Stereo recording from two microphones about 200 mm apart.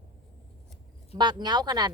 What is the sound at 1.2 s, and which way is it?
Speech, 20° right (ahead or behind).